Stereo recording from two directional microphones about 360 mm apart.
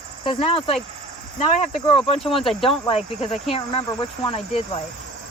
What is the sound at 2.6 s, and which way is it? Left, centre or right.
Speech, centre.